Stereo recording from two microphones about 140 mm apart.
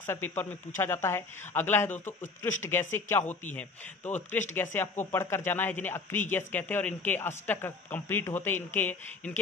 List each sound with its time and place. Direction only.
0.0 s speech: 15° left (ahead or behind)